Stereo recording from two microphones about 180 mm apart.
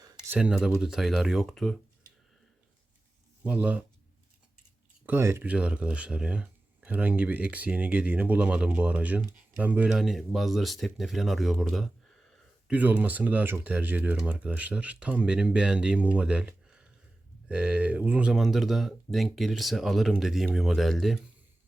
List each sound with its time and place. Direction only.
0.0 s a sound: 20° right (ahead or behind)
0.3 s speech: 5° right (ahead or behind)
3.4 s speech: 5° right (ahead or behind)
5.0 s speech: 15° right (ahead or behind)